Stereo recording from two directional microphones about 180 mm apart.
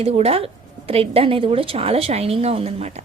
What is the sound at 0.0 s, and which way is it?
Speech, 35° right (ahead or behind).